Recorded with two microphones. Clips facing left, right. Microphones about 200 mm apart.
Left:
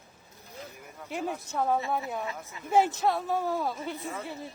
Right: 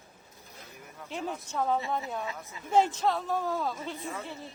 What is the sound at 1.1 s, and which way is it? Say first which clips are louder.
A woman's voice: left 2 dB; 10° left (ahead or behind).